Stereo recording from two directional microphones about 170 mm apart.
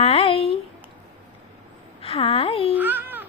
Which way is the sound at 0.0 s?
35° left (ahead or behind).